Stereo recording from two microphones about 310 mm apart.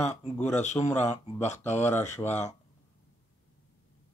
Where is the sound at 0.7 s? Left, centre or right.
Centre.